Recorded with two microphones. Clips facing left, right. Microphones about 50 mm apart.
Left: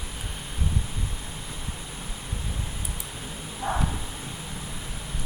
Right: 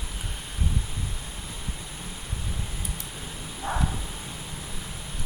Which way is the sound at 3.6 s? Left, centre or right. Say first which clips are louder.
Left 1 dB; centre.